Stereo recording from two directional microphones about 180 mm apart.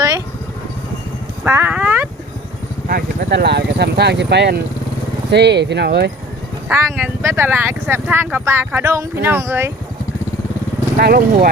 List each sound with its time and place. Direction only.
1.5 s a sound: 10° right (ahead or behind)
2.8 s speech: 55° right (ahead or behind)
6.7 s speech: 10° right (ahead or behind)
10.9 s speech: 55° right (ahead or behind)